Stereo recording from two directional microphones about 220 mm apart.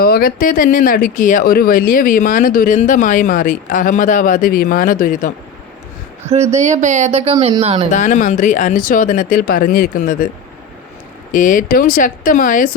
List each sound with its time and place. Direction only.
0.0 s speech: 45° left (ahead or behind)
6.2 s speech: 30° right (ahead or behind)
7.9 s speech: 35° left (ahead or behind)
11.3 s speech: 35° left (ahead or behind)